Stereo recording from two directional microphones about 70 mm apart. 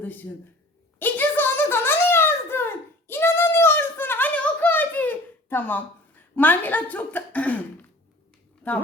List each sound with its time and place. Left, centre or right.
0.0 s speech: left
0.9 s a sound: left
8.6 s speech: left